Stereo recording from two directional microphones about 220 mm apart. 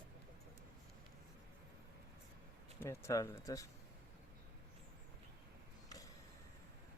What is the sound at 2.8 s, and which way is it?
Speech, 10° left (ahead or behind).